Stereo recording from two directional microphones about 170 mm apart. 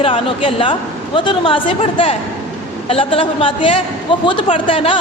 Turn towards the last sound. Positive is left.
turn(degrees=30)  # may be behind; listen again after turning